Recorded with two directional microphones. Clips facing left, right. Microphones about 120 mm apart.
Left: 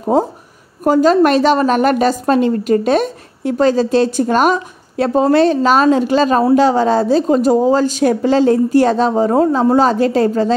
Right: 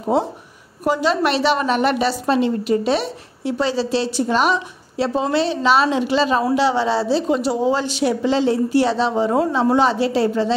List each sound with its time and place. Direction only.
0.8 s a woman's voice: 45° left (ahead or behind)